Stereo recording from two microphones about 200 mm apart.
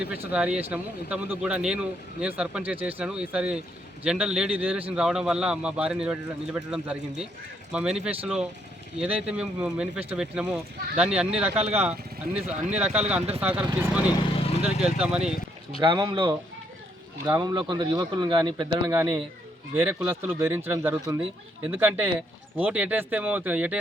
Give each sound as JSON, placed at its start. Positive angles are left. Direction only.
{"t": 0.0, "sound": "speech", "side_deg": -5}
{"t": 9.0, "sound": "speech", "side_deg": -30}
{"t": 9.4, "sound": "speech", "side_deg": -5}
{"t": 11.5, "sound": "speech", "side_deg": -30}
{"t": 11.8, "sound": "speech", "side_deg": -5}
{"t": 14.2, "sound": "vehicle", "side_deg": 30}
{"t": 14.6, "sound": "speech", "side_deg": -5}
{"t": 15.8, "sound": "speech", "side_deg": -25}
{"t": 18.9, "sound": "speech", "side_deg": -10}